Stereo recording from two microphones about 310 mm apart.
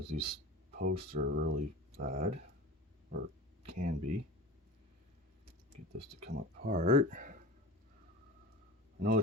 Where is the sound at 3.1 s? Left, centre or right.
Right.